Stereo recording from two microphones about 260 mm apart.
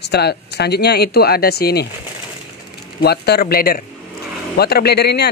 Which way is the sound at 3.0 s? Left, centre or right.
Left.